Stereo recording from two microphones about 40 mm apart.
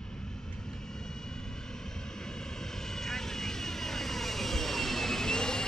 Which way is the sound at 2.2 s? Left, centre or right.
Centre.